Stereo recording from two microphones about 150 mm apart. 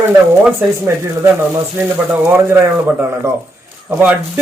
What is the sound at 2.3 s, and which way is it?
Speech, 15° right (ahead or behind).